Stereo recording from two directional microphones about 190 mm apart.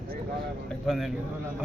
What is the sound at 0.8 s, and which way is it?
Speech, centre (ahead or behind).